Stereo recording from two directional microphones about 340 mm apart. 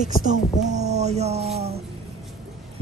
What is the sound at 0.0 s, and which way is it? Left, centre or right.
Speech, right.